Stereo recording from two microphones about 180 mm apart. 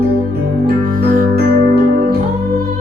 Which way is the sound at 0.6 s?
60° right (ahead or behind).